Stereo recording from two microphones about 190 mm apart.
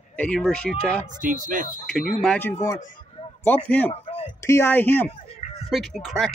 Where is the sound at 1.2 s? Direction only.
45° right (ahead or behind).